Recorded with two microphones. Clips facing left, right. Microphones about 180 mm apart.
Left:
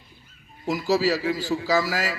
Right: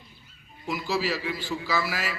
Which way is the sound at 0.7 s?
40° left (ahead or behind).